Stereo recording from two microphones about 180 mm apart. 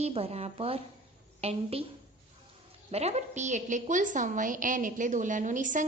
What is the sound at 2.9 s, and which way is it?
A woman's voice, 35° right (ahead or behind).